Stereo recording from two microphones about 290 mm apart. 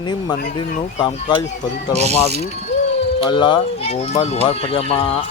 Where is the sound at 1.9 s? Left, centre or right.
Right.